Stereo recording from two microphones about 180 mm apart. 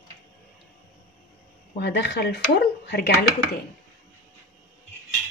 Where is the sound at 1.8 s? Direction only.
70° left (ahead or behind).